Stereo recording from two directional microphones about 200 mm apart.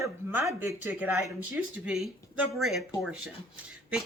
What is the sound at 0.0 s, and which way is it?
Speech, 10° right (ahead or behind).